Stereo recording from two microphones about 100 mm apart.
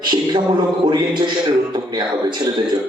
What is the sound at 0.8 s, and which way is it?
Speech, 45° right (ahead or behind).